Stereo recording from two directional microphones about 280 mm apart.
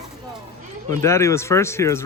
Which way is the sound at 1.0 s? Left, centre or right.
Centre.